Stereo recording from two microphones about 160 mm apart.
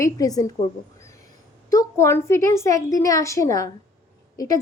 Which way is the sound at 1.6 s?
20° left (ahead or behind).